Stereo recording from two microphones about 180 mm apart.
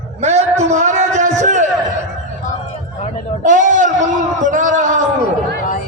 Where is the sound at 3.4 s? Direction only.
45° right (ahead or behind).